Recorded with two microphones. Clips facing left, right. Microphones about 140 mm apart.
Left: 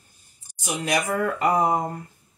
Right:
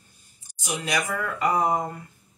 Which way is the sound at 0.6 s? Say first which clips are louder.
Left 3 dB; 40° left (ahead or behind).